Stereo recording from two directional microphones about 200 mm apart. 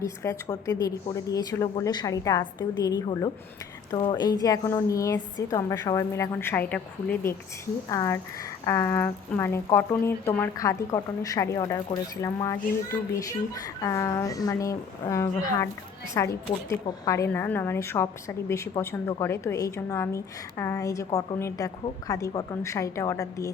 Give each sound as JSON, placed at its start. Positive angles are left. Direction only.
{"t": 0.0, "sound": "a woman's voice", "side_deg": 15}